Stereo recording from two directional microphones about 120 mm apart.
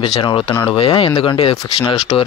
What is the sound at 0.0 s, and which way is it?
Speech, 45° left (ahead or behind).